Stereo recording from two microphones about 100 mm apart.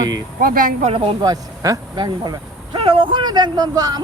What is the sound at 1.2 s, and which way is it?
Speech, 40° right (ahead or behind).